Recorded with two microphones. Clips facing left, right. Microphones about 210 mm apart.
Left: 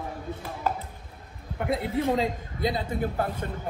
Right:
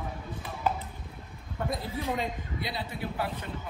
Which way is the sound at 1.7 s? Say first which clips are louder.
Left 8 dB; 65° left (ahead or behind).